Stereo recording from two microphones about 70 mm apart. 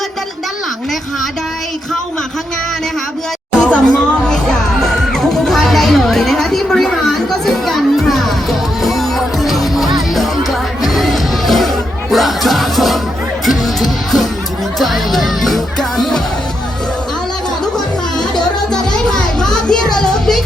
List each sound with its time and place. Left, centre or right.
3.6 s music: centre
18.2 s music: centre